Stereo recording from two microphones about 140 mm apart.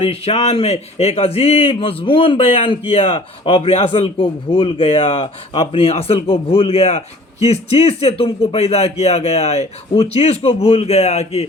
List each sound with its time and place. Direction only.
0.0 s a man's voice: 45° left (ahead or behind)